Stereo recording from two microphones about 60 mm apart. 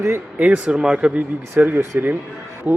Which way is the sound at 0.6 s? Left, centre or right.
Centre.